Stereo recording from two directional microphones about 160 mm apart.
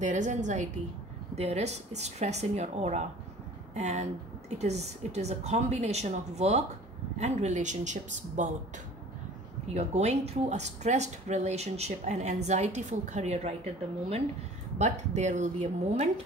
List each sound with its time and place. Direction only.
0.0 s a woman's voice: 50° right (ahead or behind)
14.8 s a woman's voice: 45° right (ahead or behind)